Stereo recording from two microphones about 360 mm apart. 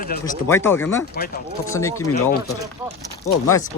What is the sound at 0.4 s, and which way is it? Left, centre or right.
Speech, centre.